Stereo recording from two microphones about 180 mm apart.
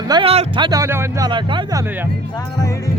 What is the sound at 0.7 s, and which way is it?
Speech, 15° right (ahead or behind).